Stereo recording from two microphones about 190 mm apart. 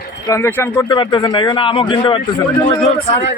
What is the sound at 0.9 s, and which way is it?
Speech, 25° left (ahead or behind).